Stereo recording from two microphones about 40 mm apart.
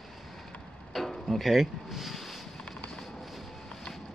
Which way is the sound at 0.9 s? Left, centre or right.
Centre.